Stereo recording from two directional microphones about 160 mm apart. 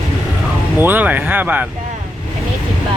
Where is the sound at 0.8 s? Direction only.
10° right (ahead or behind).